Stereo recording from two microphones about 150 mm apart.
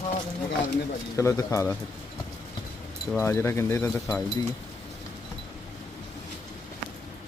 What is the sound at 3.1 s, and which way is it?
Speech, 15° left (ahead or behind).